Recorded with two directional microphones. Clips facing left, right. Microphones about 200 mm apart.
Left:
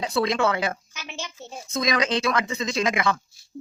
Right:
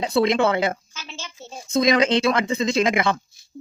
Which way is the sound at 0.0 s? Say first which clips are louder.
Right 4 dB; 25° right (ahead or behind).